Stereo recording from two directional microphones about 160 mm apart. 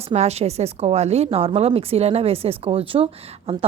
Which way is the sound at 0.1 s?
40° right (ahead or behind).